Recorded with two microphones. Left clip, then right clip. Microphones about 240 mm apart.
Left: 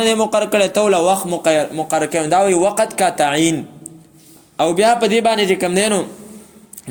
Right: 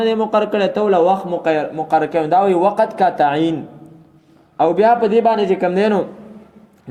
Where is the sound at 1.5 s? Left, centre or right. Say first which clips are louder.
Left 2 dB; left.